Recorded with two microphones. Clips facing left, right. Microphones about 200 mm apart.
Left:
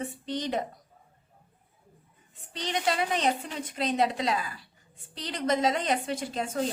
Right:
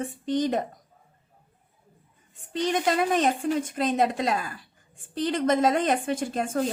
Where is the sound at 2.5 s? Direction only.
50° right (ahead or behind).